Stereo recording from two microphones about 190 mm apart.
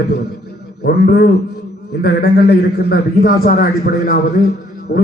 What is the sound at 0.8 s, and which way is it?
A man's voice, 60° left (ahead or behind).